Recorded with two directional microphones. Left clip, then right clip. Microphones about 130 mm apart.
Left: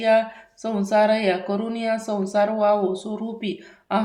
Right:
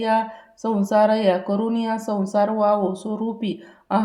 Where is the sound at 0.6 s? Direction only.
50° right (ahead or behind).